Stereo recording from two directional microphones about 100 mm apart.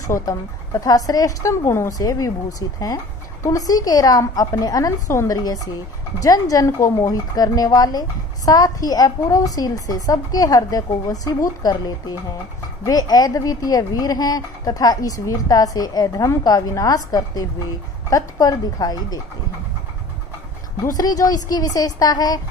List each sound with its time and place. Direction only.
0.0 s speech: 35° left (ahead or behind)
3.4 s speech: 40° left (ahead or behind)
20.9 s speech: 40° left (ahead or behind)